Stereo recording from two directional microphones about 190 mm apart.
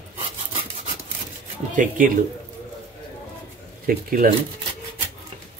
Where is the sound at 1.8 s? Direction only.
45° right (ahead or behind).